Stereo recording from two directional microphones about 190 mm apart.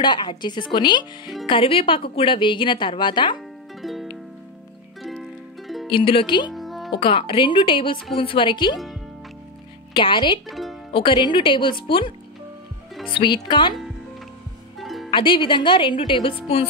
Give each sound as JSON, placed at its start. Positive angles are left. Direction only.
{"t": 0.0, "sound": "speech", "side_deg": 25}
{"t": 3.3, "sound": "music", "side_deg": 0}
{"t": 5.9, "sound": "speech", "side_deg": 25}
{"t": 6.5, "sound": "music", "side_deg": 0}
{"t": 7.0, "sound": "speech", "side_deg": 25}
{"t": 9.9, "sound": "speech", "side_deg": 25}
{"t": 10.5, "sound": "music", "side_deg": 0}
{"t": 10.9, "sound": "speech", "side_deg": 25}
{"t": 13.1, "sound": "speech", "side_deg": 25}
{"t": 14.8, "sound": "music", "side_deg": 0}
{"t": 15.0, "sound": "speech", "side_deg": 25}